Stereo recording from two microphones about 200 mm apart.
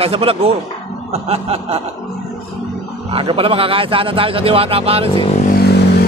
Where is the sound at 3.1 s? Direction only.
25° right (ahead or behind).